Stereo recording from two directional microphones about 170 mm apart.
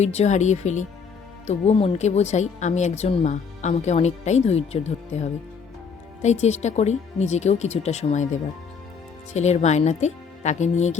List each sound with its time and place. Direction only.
0.0 s a woman's voice: 40° left (ahead or behind)